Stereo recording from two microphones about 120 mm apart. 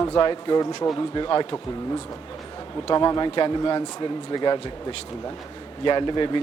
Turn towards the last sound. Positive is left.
turn(degrees=40)  # may be behind; listen again after turning